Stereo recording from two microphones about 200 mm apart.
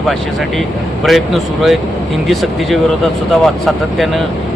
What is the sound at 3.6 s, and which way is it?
Speech, centre (ahead or behind).